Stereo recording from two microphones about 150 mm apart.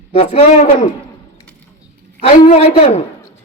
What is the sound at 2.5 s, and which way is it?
Speech, 45° left (ahead or behind).